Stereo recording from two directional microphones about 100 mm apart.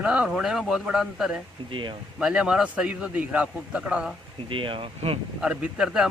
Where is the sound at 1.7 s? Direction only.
55° right (ahead or behind).